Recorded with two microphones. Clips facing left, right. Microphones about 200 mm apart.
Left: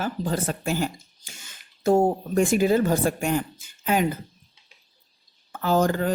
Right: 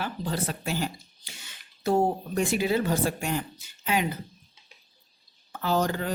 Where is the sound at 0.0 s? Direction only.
45° left (ahead or behind).